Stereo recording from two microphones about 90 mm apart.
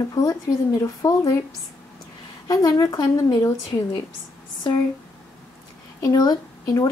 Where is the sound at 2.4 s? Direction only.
45° left (ahead or behind).